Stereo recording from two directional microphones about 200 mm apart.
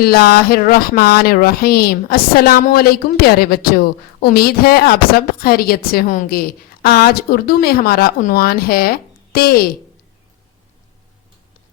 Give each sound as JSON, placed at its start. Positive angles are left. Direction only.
{"t": 0.0, "sound": "speech", "side_deg": 50}